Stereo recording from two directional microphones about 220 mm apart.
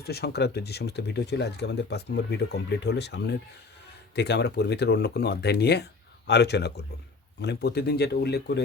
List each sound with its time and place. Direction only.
0.0 s speech: 45° left (ahead or behind)